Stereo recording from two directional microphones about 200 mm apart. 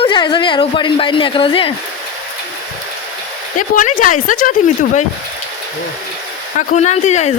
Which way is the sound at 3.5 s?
40° left (ahead or behind).